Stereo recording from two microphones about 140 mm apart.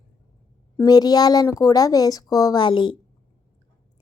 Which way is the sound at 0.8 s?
25° left (ahead or behind).